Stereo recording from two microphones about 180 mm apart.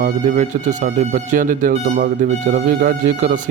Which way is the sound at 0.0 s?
45° right (ahead or behind).